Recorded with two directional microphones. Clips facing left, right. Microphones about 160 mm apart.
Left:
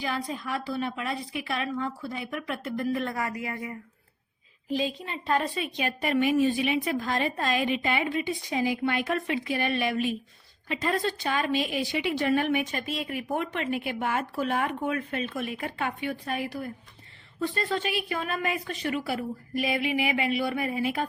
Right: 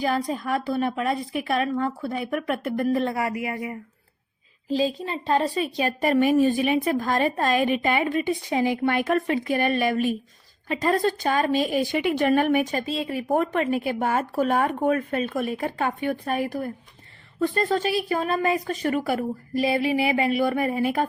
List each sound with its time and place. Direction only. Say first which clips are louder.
0.0 s speech: right 7 dB; 45° right (ahead or behind)
3.0 s speech: right 5 dB; 25° right (ahead or behind)
4.7 s speech: right 5 dB; 35° right (ahead or behind)
12.8 s speech: right 5 dB; 30° right (ahead or behind)
13.3 s speech: right 7 dB; 45° right (ahead or behind)
16.0 s a woman's voice: right 6 dB; 45° right (ahead or behind)
19.5 s speech: right 5 dB; 35° right (ahead or behind)